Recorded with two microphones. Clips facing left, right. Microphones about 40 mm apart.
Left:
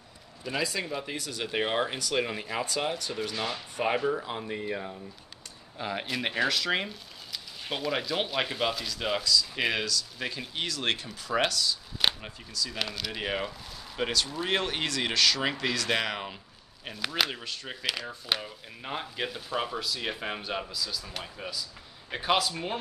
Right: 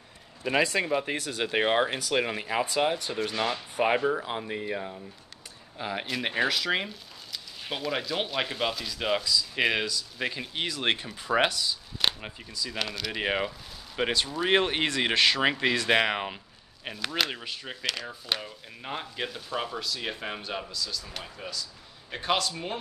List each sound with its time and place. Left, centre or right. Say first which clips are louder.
0.4 s speech: right 6 dB; right
1.4 s speech: right 4 dB; right
12.7 s speech: right 3 dB; centre
13.1 s speech: right 3 dB; centre
16.9 s speech: even; centre
17.8 s speech: left 1 dB; centre